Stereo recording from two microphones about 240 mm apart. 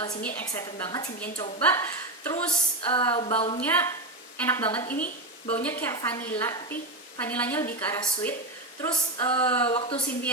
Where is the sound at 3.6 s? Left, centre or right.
Centre.